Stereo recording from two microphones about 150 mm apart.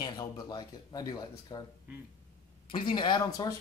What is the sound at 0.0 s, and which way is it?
Speech, 25° left (ahead or behind).